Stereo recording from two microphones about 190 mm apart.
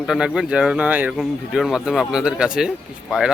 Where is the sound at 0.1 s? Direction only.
5° right (ahead or behind).